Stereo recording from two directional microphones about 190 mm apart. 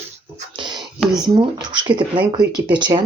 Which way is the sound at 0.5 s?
25° right (ahead or behind).